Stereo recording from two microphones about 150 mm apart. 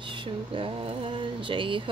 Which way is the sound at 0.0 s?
35° right (ahead or behind).